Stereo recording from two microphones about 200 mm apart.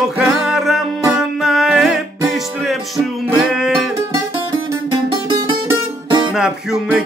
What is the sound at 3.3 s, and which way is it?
Music, 5° right (ahead or behind).